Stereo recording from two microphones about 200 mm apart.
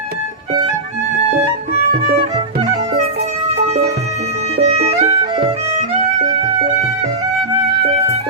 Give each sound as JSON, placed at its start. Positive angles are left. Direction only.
{"t": 2.3, "sound": "music", "side_deg": -30}
{"t": 4.5, "sound": "music", "side_deg": -30}